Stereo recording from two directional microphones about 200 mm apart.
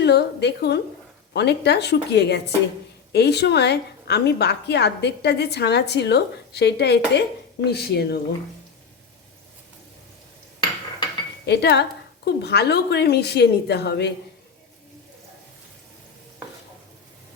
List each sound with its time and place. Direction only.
0.0 s a woman's voice: 55° left (ahead or behind)
11.4 s a woman's voice: 55° left (ahead or behind)